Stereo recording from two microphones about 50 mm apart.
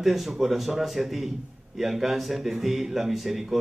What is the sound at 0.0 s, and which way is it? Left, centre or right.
Speech, centre.